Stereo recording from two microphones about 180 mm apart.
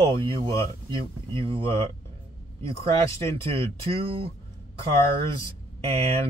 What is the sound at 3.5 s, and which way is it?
Speech, 30° right (ahead or behind).